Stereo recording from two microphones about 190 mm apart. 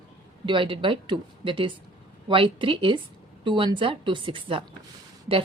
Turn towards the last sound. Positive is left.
turn(degrees=-25)  # may be behind; listen again after turning